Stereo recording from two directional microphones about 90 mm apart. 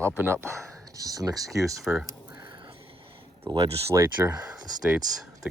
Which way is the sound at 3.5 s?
55° right (ahead or behind).